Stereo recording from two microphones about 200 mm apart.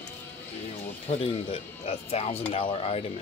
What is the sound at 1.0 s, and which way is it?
Speech, 30° left (ahead or behind).